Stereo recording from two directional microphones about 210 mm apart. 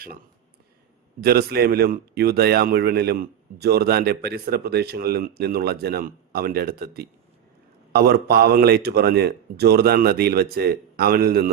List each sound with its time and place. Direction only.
1.2 s speech: 45° right (ahead or behind)